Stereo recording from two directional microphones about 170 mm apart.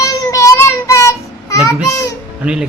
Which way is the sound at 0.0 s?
20° left (ahead or behind).